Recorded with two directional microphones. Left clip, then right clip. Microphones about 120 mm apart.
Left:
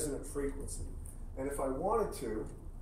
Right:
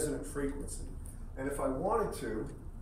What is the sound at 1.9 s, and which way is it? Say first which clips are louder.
Speech: right 1 dB; 40° left (ahead or behind).